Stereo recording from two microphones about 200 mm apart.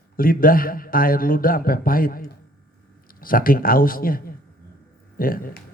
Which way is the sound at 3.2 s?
45° left (ahead or behind).